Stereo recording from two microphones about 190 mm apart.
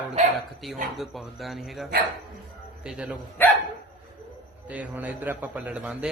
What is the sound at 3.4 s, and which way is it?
Speech, 10° left (ahead or behind).